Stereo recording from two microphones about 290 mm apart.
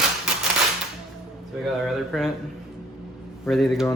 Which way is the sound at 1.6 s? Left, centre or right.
Centre.